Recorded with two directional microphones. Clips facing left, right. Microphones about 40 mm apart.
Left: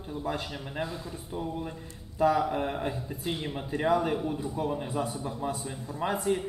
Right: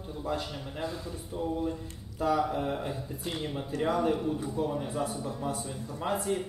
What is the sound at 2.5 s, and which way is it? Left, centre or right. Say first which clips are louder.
A man's voice: left 2 dB; left.